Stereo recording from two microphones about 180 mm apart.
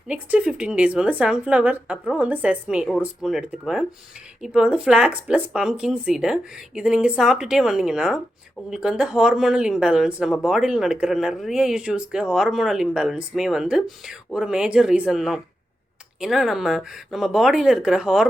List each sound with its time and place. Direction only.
0.1 s speech: 5° right (ahead or behind)